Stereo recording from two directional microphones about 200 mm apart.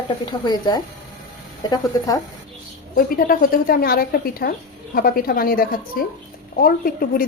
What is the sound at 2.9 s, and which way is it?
A woman's voice, 45° left (ahead or behind).